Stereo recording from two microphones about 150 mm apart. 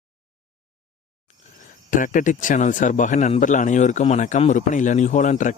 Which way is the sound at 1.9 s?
60° left (ahead or behind).